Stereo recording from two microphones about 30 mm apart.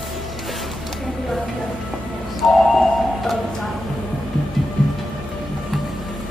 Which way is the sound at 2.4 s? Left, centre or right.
Centre.